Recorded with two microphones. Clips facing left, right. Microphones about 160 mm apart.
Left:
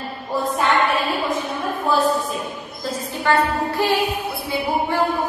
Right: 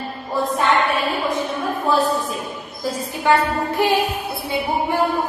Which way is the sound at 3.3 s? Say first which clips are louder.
Right 1 dB; 15° right (ahead or behind).